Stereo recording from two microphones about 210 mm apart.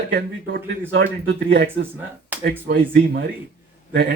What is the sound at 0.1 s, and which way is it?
Speech, 50° right (ahead or behind).